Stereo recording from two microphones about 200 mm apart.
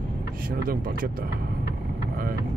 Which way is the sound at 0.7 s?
45° right (ahead or behind).